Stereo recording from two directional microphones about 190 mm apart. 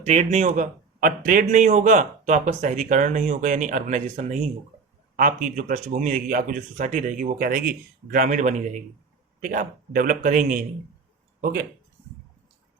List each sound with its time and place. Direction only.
0.0 s a man's voice: 35° right (ahead or behind)